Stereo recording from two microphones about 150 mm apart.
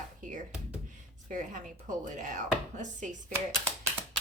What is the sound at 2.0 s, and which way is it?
Speech, 55° right (ahead or behind).